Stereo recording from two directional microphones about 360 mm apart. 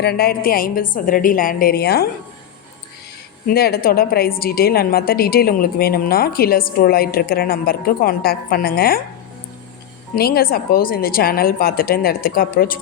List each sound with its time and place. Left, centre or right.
0.0 s a woman's voice: left
3.5 s a woman's voice: left
10.2 s a woman's voice: left